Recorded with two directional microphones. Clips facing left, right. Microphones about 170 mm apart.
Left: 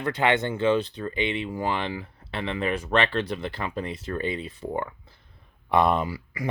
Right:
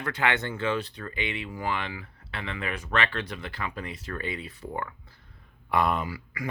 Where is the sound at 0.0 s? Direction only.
25° left (ahead or behind).